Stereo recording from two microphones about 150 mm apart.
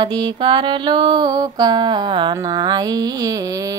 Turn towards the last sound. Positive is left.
turn(degrees=-25)  # may be behind; listen again after turning